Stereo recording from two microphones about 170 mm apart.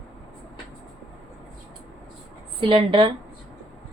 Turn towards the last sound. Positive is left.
turn(degrees=-30)  # may be behind; listen again after turning